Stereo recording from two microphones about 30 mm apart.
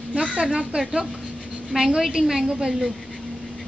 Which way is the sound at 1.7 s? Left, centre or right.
Centre.